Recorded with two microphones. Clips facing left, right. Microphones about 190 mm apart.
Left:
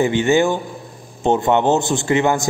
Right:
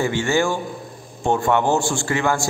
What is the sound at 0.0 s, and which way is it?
A man's voice, 20° left (ahead or behind).